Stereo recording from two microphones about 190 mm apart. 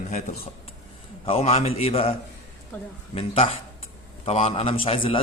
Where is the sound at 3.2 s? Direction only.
30° left (ahead or behind).